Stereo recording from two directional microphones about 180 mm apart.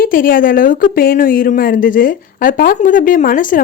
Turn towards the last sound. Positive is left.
turn(degrees=50)  # may be behind; listen again after turning